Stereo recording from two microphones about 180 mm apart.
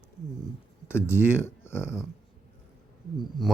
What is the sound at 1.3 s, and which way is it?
Speech, 15° left (ahead or behind).